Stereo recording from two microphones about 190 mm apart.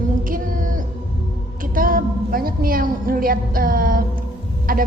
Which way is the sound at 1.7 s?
50° right (ahead or behind).